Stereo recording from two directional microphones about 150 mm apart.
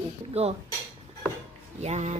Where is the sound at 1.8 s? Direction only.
45° right (ahead or behind).